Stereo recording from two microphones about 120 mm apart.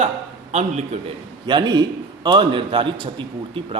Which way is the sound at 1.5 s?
35° right (ahead or behind).